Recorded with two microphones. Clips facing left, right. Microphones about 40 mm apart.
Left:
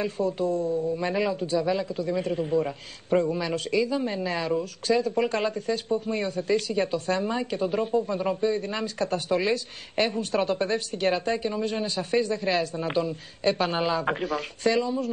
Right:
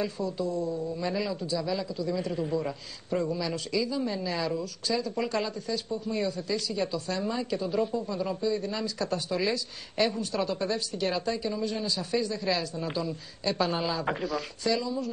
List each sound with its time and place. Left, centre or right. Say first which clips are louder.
0.0 s speech: left 4 dB; left
2.3 s a man's voice: left 4 dB; left
3.1 s speech: left 5 dB; left